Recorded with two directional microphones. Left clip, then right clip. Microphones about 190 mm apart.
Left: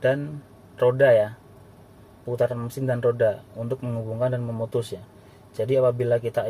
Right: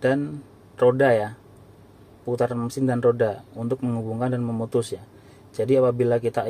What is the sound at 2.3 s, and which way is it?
Speech, 15° right (ahead or behind).